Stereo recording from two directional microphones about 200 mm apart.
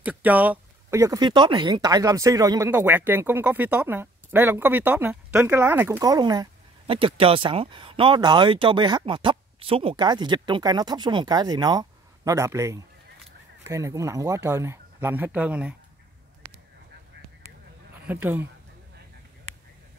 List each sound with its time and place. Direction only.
0.0 s speech: 5° right (ahead or behind)
18.0 s speech: 10° right (ahead or behind)